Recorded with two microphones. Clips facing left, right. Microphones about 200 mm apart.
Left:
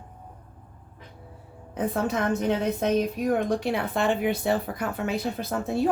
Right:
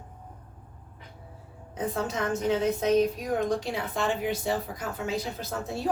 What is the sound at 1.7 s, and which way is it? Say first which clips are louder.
A woman's voice: left 4 dB; 60° left (ahead or behind).